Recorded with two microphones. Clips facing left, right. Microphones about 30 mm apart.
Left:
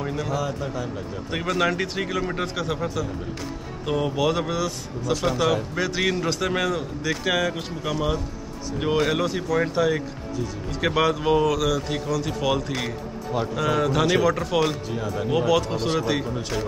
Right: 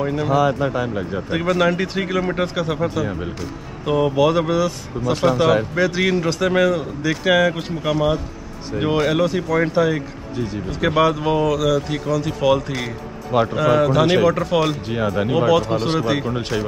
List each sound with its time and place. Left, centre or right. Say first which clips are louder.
0.0 s speech: right 9 dB; right
1.3 s speech: right 5 dB; centre
10.3 s speech: right 5 dB; right
11.0 s speech: right 3 dB; centre
14.9 s speech: right 6 dB; right
15.3 s speech: right 4 dB; centre